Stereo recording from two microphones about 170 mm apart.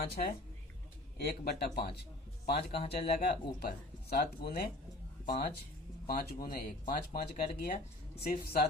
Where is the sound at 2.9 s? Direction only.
65° left (ahead or behind).